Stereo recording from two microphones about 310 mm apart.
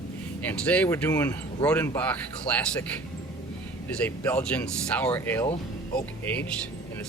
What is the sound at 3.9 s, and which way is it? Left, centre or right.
Speech, centre.